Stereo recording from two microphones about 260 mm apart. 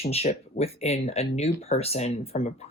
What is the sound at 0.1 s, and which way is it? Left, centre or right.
Speech, left.